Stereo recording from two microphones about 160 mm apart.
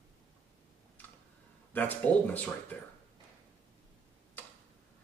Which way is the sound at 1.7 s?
10° left (ahead or behind).